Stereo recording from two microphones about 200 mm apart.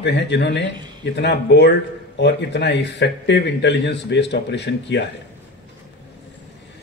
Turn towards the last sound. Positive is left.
turn(degrees=60)  # may be behind; listen again after turning